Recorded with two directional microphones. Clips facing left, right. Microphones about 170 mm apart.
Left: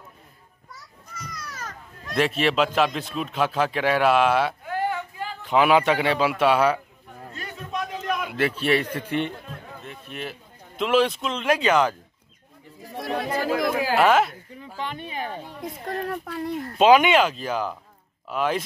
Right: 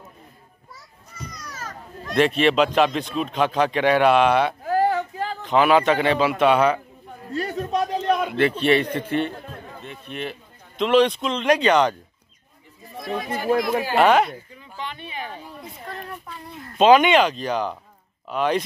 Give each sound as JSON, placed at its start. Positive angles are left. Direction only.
{"t": 2.1, "sound": "speech", "side_deg": 0}
{"t": 4.6, "sound": "a sound", "side_deg": -40}
{"t": 5.4, "sound": "a man's voice", "side_deg": 10}
{"t": 7.3, "sound": "a sound", "side_deg": -40}
{"t": 8.3, "sound": "a man's voice", "side_deg": 5}
{"t": 12.9, "sound": "speech", "side_deg": 65}
{"t": 13.9, "sound": "speech", "side_deg": 0}
{"t": 14.8, "sound": "speech", "side_deg": 45}
{"t": 16.3, "sound": "speech", "side_deg": 90}
{"t": 16.7, "sound": "speech", "side_deg": 10}